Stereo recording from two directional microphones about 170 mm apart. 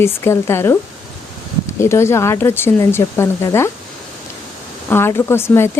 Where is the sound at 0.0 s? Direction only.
15° left (ahead or behind).